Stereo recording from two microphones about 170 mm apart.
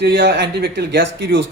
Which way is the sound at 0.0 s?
80° right.